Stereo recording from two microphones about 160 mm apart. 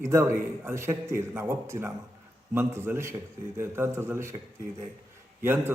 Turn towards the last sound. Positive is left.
turn(degrees=-15)  # may be behind; listen again after turning